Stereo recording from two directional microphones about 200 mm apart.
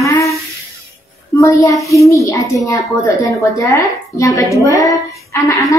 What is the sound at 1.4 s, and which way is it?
A child's voice, 15° left (ahead or behind).